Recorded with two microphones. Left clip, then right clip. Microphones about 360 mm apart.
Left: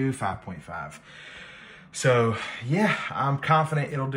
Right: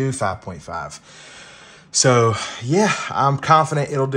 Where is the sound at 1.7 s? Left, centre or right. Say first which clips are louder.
Right 6 dB; centre.